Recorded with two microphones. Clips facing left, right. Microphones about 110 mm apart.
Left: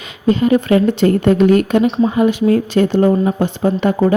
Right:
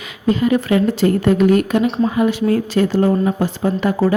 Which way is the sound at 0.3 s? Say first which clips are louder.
Left 3 dB; 25° left (ahead or behind).